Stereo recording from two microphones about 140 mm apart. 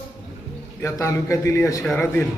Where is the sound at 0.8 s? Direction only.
20° left (ahead or behind).